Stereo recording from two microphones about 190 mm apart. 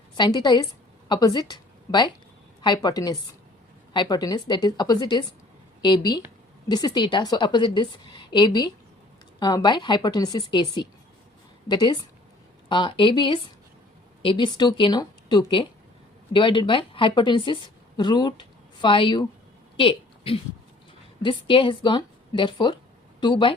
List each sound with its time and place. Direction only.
0.2 s a woman's voice: 20° left (ahead or behind)
19.7 s a sound: 30° left (ahead or behind)
21.2 s a woman's voice: 25° left (ahead or behind)